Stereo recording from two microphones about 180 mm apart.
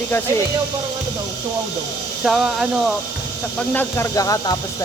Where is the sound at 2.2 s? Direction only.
Centre (ahead or behind).